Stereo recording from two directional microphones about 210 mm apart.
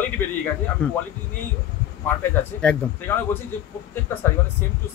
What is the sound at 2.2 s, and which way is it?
A man's voice, 10° left (ahead or behind).